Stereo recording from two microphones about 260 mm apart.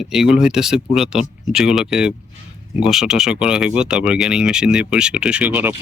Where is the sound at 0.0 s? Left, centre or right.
Centre.